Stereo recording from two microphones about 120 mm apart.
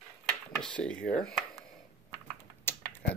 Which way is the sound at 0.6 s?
10° left (ahead or behind).